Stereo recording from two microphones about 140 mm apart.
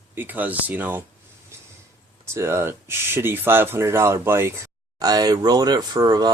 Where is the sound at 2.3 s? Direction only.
20° right (ahead or behind).